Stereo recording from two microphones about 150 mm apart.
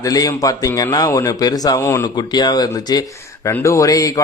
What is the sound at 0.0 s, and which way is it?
Speech, 25° left (ahead or behind).